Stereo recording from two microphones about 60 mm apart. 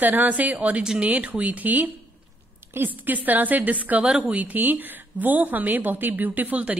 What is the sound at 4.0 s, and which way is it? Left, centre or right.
Speech, centre.